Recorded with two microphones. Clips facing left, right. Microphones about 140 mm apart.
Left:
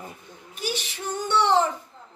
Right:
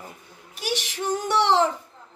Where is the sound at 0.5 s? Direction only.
80° right.